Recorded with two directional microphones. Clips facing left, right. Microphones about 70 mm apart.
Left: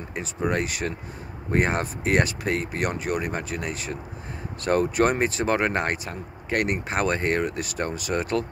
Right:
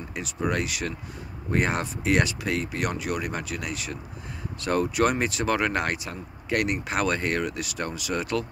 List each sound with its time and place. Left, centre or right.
0.5 s speech: left